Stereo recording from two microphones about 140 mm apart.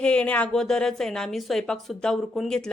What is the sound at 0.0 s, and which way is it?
A woman's voice, 10° left (ahead or behind).